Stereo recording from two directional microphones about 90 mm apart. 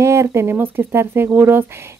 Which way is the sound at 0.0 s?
30° right (ahead or behind).